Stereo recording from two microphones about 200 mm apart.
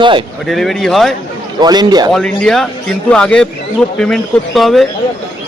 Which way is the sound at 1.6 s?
20° right (ahead or behind).